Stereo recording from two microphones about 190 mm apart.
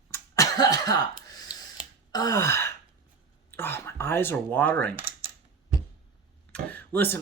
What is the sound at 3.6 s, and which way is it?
Speech, 10° left (ahead or behind).